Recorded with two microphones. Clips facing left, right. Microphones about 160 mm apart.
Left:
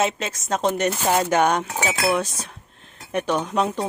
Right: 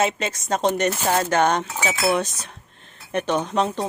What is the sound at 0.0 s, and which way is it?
Speech, centre (ahead or behind).